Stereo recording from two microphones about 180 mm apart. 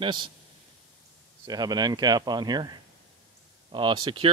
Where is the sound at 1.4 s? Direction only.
20° right (ahead or behind).